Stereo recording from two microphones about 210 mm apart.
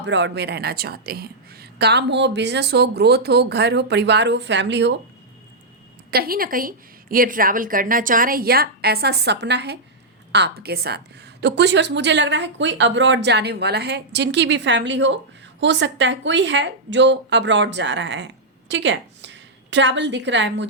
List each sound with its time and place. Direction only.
0.0 s a woman's voice: 55° right (ahead or behind)
6.1 s a woman's voice: 45° right (ahead or behind)